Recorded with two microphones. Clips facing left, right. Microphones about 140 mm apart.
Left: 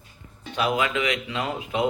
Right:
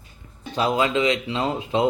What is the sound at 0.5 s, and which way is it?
Speech, 30° right (ahead or behind).